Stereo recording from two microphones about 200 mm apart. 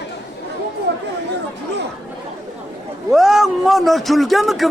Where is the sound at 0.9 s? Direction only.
60° right (ahead or behind).